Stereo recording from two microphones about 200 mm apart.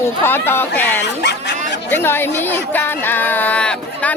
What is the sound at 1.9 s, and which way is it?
Speech, 10° left (ahead or behind).